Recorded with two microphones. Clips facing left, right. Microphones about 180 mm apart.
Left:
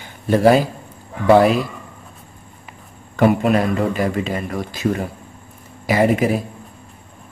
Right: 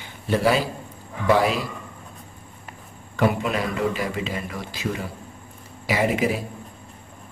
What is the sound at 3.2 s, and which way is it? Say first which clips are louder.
A man's voice: left 7 dB; 50° left (ahead or behind).